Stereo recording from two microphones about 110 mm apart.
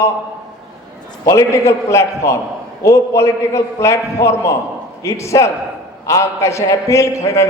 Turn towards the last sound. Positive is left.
turn(degrees=25)  # may be behind; listen again after turning